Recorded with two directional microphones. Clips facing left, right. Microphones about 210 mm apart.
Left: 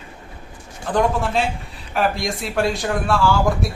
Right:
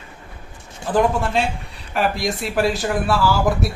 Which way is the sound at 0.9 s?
5° right (ahead or behind).